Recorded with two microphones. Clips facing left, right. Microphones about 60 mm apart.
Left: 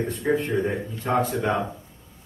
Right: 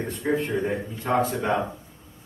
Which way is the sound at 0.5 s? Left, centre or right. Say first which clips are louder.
Left 1 dB; centre.